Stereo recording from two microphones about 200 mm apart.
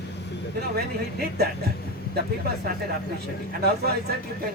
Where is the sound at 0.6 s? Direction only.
55° right (ahead or behind).